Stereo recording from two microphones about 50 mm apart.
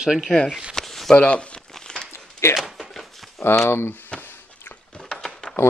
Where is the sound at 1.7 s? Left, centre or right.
Centre.